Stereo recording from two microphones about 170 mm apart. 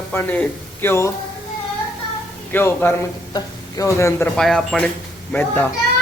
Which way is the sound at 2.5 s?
10° left (ahead or behind).